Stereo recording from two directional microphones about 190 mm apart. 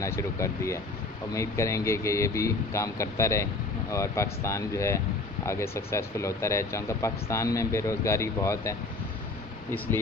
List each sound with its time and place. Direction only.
0.0 s speech: 15° left (ahead or behind)